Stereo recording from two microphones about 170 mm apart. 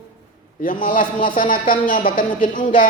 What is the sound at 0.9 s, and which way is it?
A man's voice, 55° left (ahead or behind).